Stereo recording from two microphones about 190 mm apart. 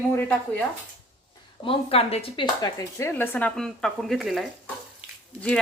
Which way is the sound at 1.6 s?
30° left (ahead or behind).